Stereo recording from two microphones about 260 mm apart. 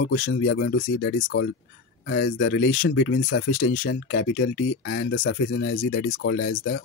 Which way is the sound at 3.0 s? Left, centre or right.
Left.